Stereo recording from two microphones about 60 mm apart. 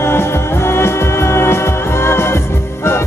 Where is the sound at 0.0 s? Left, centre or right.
Left.